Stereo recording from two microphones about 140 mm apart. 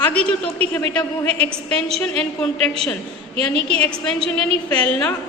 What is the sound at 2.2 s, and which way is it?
Speech, 5° left (ahead or behind).